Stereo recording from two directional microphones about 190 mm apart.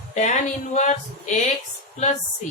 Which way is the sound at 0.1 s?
40° left (ahead or behind).